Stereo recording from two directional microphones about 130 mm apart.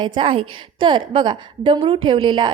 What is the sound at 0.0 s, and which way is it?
A woman's voice, 40° right (ahead or behind).